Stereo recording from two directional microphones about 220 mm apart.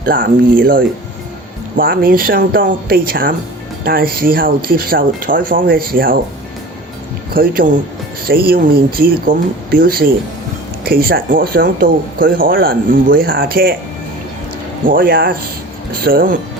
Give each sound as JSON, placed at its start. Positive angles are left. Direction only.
{"t": 0.0, "sound": "speech", "side_deg": -40}
{"t": 7.3, "sound": "speech", "side_deg": -40}
{"t": 14.8, "sound": "speech", "side_deg": -40}